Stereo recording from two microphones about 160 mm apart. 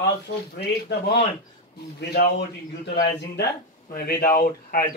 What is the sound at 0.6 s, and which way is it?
A man's voice, 90° left.